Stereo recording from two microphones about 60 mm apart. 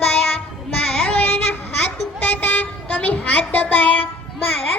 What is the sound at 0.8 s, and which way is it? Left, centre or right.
A child's voice, left.